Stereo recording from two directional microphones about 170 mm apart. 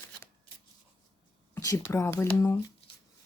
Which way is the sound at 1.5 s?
20° left (ahead or behind).